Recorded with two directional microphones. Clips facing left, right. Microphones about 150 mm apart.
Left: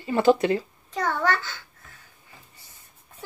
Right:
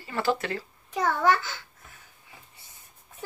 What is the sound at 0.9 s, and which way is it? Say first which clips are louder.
Speech: right 2 dB; 15° right (ahead or behind).